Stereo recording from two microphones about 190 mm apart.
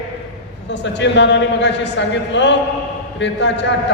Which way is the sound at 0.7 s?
70° left (ahead or behind).